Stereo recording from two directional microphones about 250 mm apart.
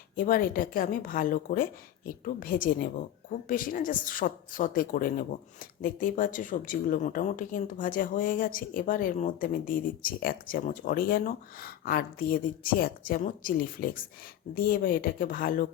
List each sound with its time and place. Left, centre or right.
0.2 s speech: left